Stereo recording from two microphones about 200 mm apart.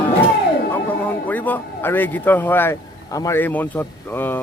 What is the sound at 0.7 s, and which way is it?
Speech, 10° left (ahead or behind).